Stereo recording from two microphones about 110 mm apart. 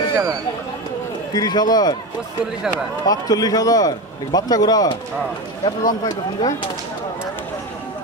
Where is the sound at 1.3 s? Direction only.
40° left (ahead or behind).